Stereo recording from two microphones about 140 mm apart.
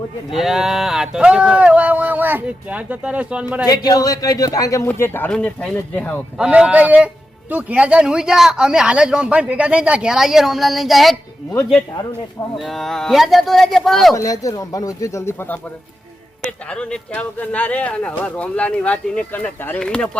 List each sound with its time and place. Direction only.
0.3 s speech: centre (ahead or behind)
3.6 s speech: 25° left (ahead or behind)
5.3 s speech: 5° left (ahead or behind)
6.4 s speech: 10° right (ahead or behind)
12.5 s speech: centre (ahead or behind)
14.2 s speech: 25° left (ahead or behind)
16.7 s speech: 5° left (ahead or behind)